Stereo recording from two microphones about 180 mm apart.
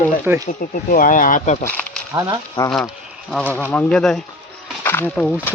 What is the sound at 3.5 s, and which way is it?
Speech, 10° left (ahead or behind).